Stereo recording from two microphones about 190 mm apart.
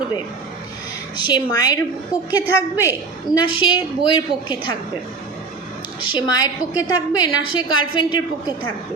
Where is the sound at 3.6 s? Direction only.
25° left (ahead or behind).